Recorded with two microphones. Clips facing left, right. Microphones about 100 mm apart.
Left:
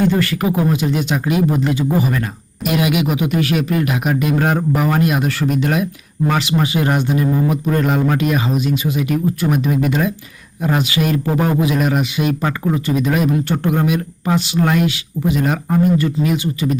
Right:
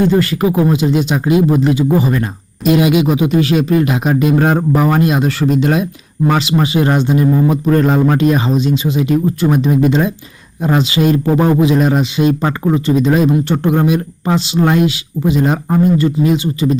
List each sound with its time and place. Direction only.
0.1 s a man's voice: 20° right (ahead or behind)
7.4 s a man's voice: 35° right (ahead or behind)